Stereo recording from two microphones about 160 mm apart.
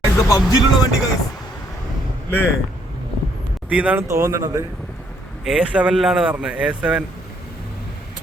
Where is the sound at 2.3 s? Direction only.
10° left (ahead or behind).